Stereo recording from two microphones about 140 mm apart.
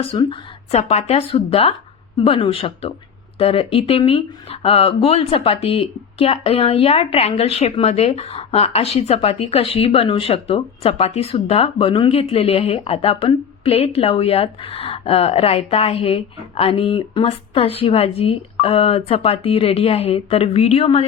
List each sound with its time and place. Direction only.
0.1 s speech: 40° left (ahead or behind)